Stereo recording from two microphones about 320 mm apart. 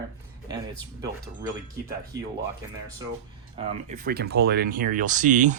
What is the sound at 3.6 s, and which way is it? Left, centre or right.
Speech, right.